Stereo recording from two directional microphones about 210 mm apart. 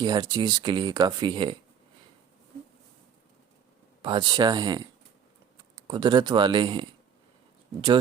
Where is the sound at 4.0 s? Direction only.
20° right (ahead or behind).